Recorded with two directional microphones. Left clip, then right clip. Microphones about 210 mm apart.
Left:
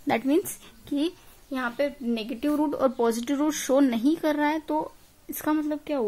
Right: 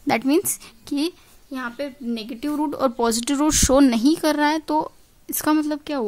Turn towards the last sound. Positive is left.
turn(degrees=-55)  # may be behind; listen again after turning